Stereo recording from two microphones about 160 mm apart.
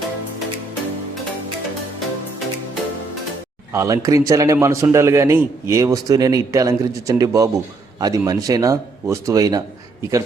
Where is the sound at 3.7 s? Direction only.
20° right (ahead or behind).